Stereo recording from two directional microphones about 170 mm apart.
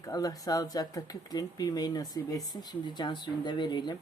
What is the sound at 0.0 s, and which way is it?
Speech, 20° left (ahead or behind).